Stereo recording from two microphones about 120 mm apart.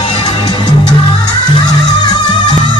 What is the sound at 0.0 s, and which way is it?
Music, 50° left (ahead or behind).